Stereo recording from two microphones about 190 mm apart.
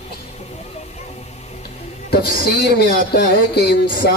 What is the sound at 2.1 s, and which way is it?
Speech, 55° left (ahead or behind).